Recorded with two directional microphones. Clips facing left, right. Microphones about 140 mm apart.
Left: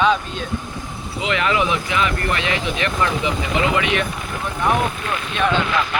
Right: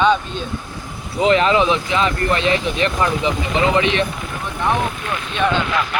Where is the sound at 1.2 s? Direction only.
35° right (ahead or behind).